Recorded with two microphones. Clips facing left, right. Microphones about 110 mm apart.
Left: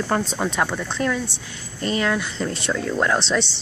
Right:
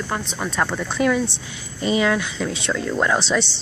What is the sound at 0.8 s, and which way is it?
Speech, 10° right (ahead or behind).